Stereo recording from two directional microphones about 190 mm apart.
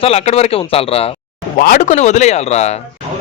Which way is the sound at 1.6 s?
45° left (ahead or behind).